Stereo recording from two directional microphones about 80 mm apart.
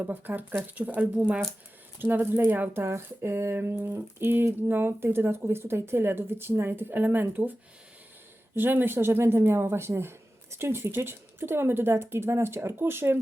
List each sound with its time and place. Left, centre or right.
0.0 s speech: right
2.0 s speech: right
8.5 s speech: right